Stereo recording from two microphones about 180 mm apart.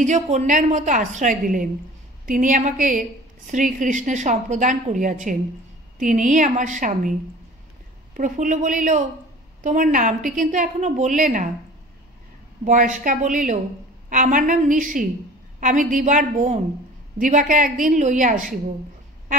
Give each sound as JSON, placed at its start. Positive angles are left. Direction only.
{"t": 0.0, "sound": "a woman's voice", "side_deg": -40}
{"t": 8.2, "sound": "a woman's voice", "side_deg": -45}
{"t": 12.6, "sound": "a woman's voice", "side_deg": -45}